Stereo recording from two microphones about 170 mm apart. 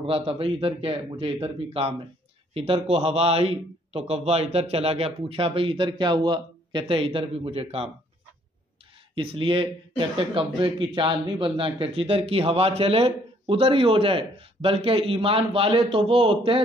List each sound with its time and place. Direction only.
0.0 s speech: 35° right (ahead or behind)
9.1 s speech: 30° right (ahead or behind)